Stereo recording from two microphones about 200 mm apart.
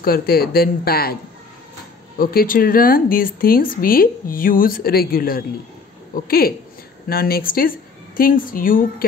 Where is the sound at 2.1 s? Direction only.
45° left (ahead or behind).